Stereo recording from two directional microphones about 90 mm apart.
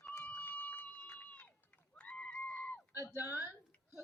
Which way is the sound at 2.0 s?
15° left (ahead or behind).